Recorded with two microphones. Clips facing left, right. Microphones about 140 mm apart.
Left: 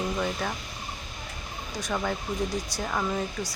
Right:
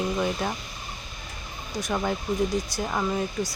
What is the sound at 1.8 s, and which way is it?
Speech, 10° right (ahead or behind).